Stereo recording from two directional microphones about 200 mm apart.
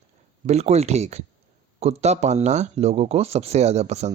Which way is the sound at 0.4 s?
35° right (ahead or behind).